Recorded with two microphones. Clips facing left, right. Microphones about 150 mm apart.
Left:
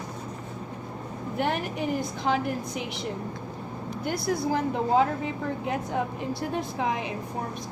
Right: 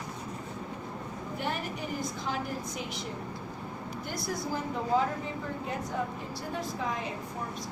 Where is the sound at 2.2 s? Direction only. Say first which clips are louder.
Left 11 dB; 70° left (ahead or behind).